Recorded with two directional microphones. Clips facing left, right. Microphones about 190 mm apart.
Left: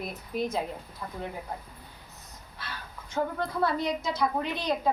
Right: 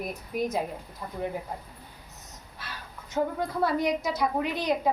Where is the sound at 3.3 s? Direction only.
15° right (ahead or behind).